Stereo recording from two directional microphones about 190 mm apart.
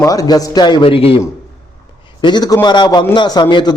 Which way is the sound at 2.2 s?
25° left (ahead or behind).